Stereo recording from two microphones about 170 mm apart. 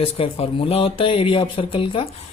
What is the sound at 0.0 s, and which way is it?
Speech, 35° left (ahead or behind).